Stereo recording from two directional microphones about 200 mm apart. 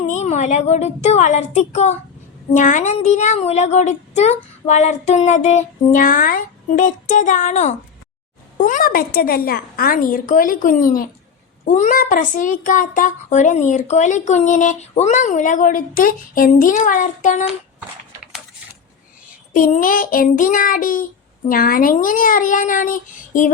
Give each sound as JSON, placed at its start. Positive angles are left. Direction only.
{"t": 0.0, "sound": "a woman's voice", "side_deg": 35}
{"t": 18.2, "sound": "a sound", "side_deg": 0}
{"t": 19.5, "sound": "a woman's voice", "side_deg": 40}